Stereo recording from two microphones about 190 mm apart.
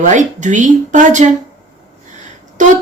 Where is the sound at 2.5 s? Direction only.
40° right (ahead or behind).